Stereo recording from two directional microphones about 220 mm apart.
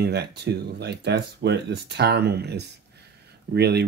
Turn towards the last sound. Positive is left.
turn(degrees=-50)  # may be behind; listen again after turning